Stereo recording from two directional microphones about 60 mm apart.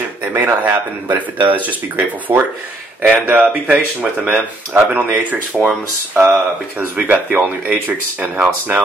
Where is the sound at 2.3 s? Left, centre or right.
Right.